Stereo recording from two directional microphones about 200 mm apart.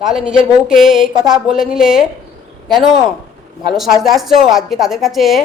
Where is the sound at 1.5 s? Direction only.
Centre (ahead or behind).